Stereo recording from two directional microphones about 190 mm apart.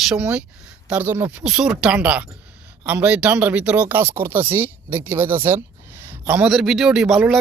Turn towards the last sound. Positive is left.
turn(degrees=0)  # may be behind; listen again after turning